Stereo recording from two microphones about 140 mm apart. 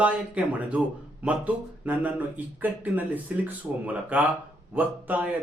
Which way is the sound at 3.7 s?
20° right (ahead or behind).